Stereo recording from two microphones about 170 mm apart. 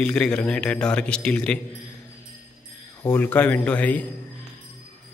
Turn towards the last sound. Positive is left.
turn(degrees=10)  # may be behind; listen again after turning